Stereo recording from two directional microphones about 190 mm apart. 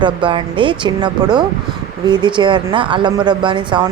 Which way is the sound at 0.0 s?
25° right (ahead or behind).